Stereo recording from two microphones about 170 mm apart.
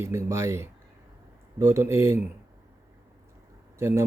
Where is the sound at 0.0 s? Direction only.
15° right (ahead or behind).